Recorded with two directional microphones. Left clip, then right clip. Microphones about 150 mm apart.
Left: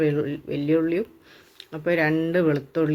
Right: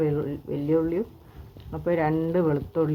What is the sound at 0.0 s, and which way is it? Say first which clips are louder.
Speech: left 3 dB; 20° left (ahead or behind).